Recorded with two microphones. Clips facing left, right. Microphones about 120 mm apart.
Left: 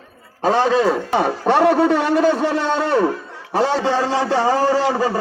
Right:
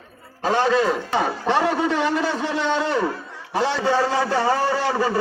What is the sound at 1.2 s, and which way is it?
A man's voice, 50° left (ahead or behind).